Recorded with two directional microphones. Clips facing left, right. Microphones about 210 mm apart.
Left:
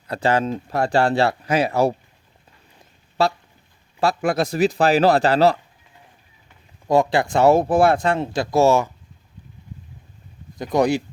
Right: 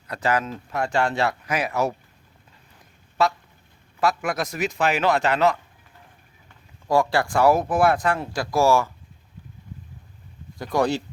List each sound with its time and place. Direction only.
0.1 s speech: 30° left (ahead or behind)
3.2 s speech: 30° left (ahead or behind)
6.8 s speech: 20° left (ahead or behind)
10.6 s speech: 20° left (ahead or behind)